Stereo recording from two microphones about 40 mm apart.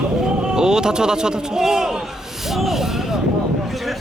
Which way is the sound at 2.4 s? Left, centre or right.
Centre.